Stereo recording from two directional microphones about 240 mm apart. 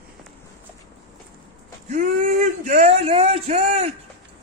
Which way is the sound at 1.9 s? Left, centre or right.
Right.